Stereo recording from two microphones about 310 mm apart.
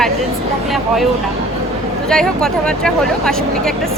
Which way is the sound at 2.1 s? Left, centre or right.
Centre.